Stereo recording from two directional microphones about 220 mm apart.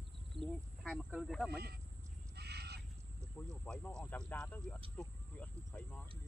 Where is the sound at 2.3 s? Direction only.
50° right (ahead or behind).